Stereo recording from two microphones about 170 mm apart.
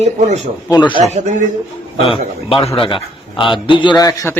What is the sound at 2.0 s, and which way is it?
A man's voice, 30° left (ahead or behind).